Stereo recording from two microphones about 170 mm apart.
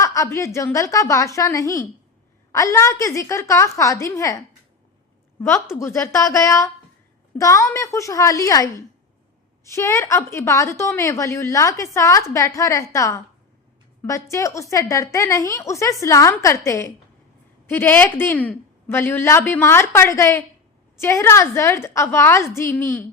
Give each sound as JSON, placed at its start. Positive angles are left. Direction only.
{"t": 0.0, "sound": "a woman's voice", "side_deg": 20}